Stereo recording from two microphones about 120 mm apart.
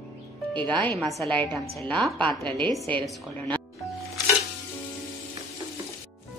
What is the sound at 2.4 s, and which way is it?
Speech, 40° right (ahead or behind).